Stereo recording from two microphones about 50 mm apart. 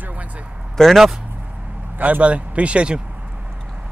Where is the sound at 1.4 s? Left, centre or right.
Right.